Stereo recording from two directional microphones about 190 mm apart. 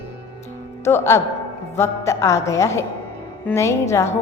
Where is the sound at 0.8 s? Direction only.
15° left (ahead or behind).